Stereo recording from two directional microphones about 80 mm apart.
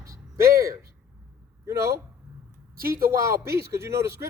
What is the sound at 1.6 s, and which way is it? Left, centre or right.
Speech, right.